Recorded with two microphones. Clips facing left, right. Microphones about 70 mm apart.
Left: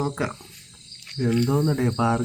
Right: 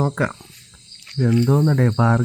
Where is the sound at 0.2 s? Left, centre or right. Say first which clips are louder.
Right 5 dB; right.